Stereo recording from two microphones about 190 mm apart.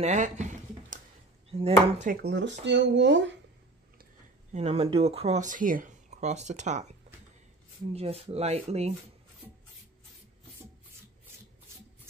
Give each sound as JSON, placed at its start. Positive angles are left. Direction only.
{"t": 0.0, "sound": "a sound", "side_deg": -40}
{"t": 1.5, "sound": "speech", "side_deg": -30}
{"t": 2.0, "sound": "speech", "side_deg": -60}
{"t": 4.0, "sound": "speech", "side_deg": -35}
{"t": 7.9, "sound": "speech", "side_deg": -30}